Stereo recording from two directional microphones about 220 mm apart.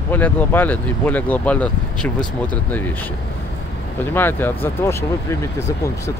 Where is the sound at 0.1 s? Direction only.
10° left (ahead or behind).